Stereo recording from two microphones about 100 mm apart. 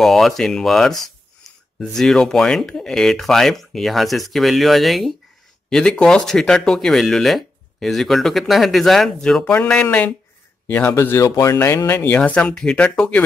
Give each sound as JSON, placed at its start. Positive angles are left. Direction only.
{"t": 0.0, "sound": "speech", "side_deg": 0}
{"t": 10.9, "sound": "speech", "side_deg": 30}
{"t": 12.2, "sound": "speech", "side_deg": 10}